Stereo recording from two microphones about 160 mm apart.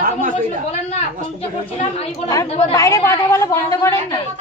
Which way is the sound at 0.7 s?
40° left (ahead or behind).